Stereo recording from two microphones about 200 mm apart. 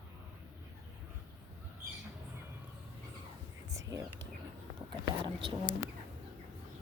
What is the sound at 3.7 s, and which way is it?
Whispering, 15° right (ahead or behind).